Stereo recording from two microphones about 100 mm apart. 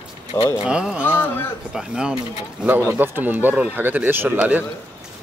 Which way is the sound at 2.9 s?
20° right (ahead or behind).